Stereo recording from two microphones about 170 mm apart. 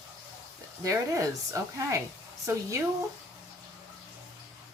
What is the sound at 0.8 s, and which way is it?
Speech, 20° right (ahead or behind).